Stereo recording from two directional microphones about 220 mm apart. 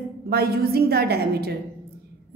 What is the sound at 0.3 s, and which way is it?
A woman's voice, 45° right (ahead or behind).